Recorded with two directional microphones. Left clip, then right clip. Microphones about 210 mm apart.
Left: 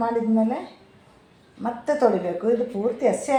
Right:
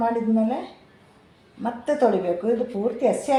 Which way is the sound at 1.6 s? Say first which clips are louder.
Even; 5° left (ahead or behind).